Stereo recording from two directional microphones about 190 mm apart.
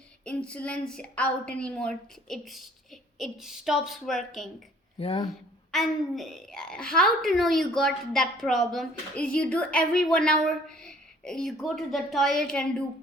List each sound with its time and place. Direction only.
0.3 s a woman's voice: 5° left (ahead or behind)
4.9 s speech: 25° left (ahead or behind)
5.7 s a woman's voice: centre (ahead or behind)